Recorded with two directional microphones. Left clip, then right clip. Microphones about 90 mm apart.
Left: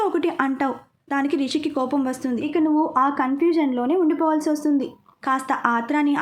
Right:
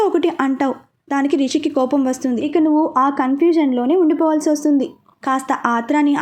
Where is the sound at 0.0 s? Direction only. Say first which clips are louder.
Right 5 dB; 40° right (ahead or behind).